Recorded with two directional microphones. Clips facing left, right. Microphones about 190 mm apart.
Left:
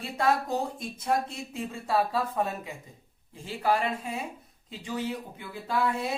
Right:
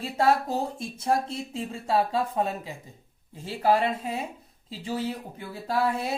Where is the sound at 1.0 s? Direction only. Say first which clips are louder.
Right 2 dB; 25° right (ahead or behind).